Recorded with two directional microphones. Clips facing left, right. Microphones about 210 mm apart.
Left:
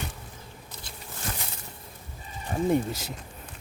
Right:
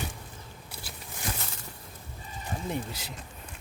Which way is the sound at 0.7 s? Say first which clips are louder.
Right 1 dB; 5° right (ahead or behind).